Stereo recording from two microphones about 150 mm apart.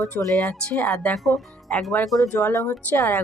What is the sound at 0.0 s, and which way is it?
Speech, 5° left (ahead or behind).